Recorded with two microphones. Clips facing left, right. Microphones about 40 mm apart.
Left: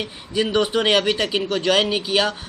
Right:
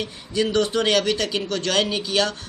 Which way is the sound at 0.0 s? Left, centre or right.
Centre.